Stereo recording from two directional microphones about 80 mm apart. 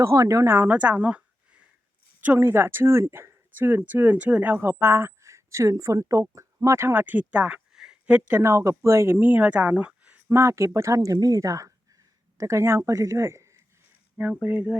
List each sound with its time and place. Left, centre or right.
0.0 s a woman's voice: right
0.5 s a woman's voice: right
8.4 s speech: right; by 10.2 s centre
10.2 s a woman's voice: right
14.4 s speech: centre